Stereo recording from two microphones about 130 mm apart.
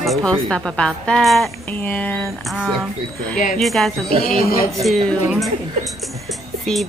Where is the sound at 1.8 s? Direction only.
15° left (ahead or behind).